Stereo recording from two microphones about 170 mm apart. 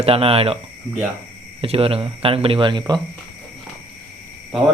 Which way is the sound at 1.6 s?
35° right (ahead or behind).